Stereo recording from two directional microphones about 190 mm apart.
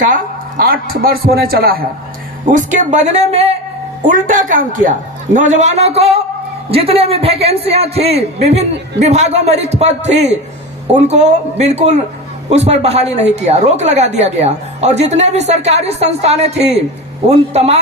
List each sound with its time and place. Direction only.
0.0 s a man's voice: 45° right (ahead or behind)
2.5 s a woman's voice: 40° right (ahead or behind)